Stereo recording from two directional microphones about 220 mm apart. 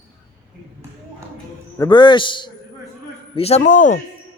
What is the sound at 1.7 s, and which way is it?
A man's voice, 15° left (ahead or behind).